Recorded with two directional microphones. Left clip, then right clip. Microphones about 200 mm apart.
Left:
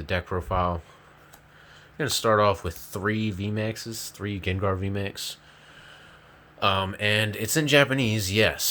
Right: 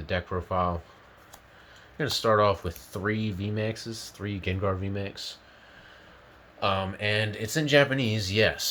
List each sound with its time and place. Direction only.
0.0 s speech: 25° left (ahead or behind)
2.0 s speech: 20° left (ahead or behind)
6.6 s speech: 35° left (ahead or behind)